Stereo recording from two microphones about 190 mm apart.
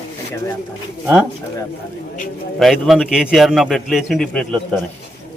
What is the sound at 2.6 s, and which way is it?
A man's voice, centre (ahead or behind).